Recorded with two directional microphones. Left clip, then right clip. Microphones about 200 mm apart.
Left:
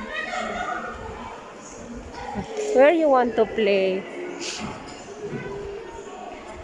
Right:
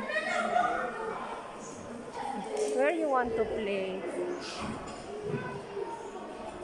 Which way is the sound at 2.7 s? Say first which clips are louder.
Left 13 dB; 25° left (ahead or behind).